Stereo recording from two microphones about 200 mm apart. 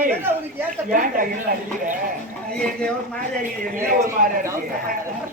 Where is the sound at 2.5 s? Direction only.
5° left (ahead or behind).